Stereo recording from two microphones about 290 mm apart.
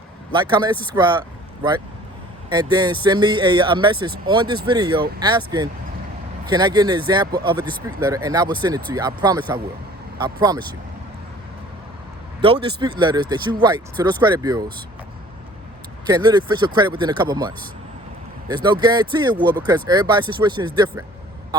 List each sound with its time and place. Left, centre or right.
0.3 s speech: centre
2.5 s speech: centre
12.4 s speech: centre
16.0 s speech: centre